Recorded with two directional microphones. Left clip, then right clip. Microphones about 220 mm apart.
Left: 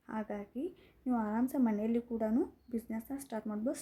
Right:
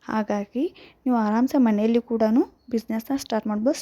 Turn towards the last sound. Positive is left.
turn(degrees=-35)  # may be behind; listen again after turning